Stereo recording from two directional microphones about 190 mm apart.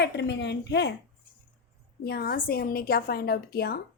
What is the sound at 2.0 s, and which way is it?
A woman's voice, 55° left (ahead or behind).